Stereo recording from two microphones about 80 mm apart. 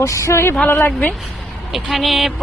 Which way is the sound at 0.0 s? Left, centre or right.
Left.